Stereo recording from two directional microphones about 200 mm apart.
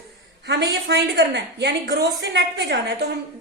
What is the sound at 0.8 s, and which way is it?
A woman's voice, 55° right (ahead or behind).